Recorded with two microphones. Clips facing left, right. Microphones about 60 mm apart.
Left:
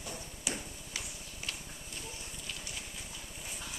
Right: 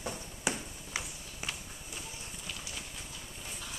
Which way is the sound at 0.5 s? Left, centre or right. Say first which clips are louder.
Right 5 dB; right.